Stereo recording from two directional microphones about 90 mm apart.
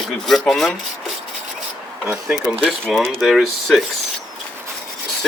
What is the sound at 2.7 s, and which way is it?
Speech, centre (ahead or behind).